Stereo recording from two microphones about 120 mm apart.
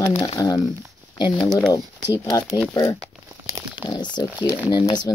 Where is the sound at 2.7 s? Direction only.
30° left (ahead or behind).